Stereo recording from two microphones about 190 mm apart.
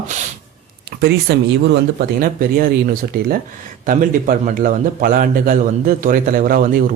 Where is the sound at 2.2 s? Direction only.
50° right (ahead or behind).